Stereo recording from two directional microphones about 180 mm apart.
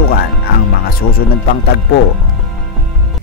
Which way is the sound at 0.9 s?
55° left (ahead or behind).